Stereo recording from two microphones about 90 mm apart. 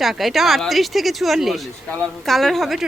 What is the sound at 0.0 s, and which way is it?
Speech, centre (ahead or behind).